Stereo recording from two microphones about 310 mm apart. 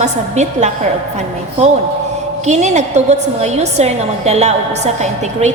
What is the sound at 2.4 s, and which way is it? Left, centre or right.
A woman's voice, right.